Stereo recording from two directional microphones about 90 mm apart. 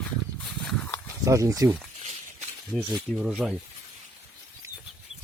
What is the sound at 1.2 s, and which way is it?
Speech, 35° right (ahead or behind).